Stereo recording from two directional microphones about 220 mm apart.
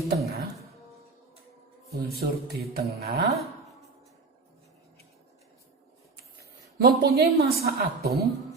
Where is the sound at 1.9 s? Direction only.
45° right (ahead or behind).